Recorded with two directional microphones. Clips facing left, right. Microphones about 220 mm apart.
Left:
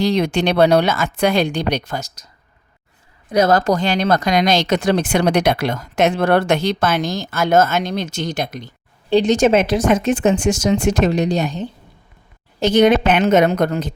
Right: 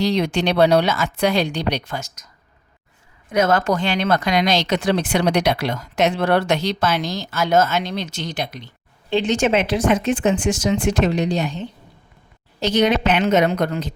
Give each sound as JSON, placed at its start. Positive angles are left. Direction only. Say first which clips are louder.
{"t": 0.0, "sound": "speech", "louder": "left 2 dB", "side_deg": 50}
{"t": 3.2, "sound": "speech", "louder": "left 3 dB", "side_deg": 35}